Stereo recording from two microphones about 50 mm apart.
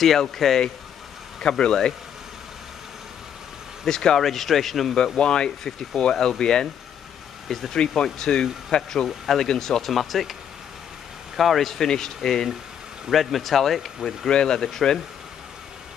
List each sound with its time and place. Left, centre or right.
0.0 s speech: centre
1.4 s speech: centre
3.8 s speech: centre
4.3 s speech: centre
11.3 s speech: centre
14.3 s speech: centre